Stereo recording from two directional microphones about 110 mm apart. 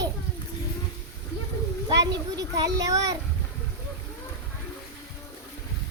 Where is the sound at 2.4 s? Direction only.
35° right (ahead or behind).